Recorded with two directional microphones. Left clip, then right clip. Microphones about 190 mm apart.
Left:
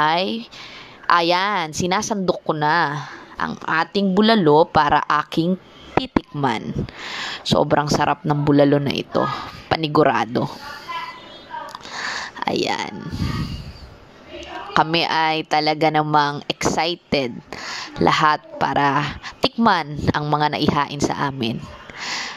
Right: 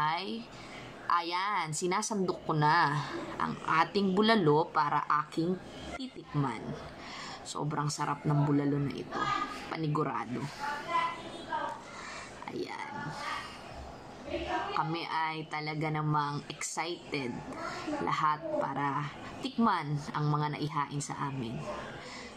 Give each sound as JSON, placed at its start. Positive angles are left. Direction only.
{"t": 0.0, "sound": "a woman's voice", "side_deg": 45}
{"t": 12.0, "sound": "whispering", "side_deg": 50}
{"t": 14.7, "sound": "a woman's voice", "side_deg": 50}
{"t": 22.0, "sound": "a sound", "side_deg": 50}